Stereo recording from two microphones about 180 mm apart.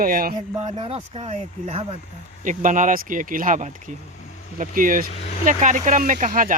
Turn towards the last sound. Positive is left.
turn(degrees=-45)  # may be behind; listen again after turning